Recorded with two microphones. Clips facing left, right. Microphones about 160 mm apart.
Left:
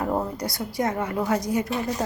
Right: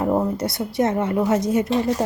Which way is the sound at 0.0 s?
20° right (ahead or behind).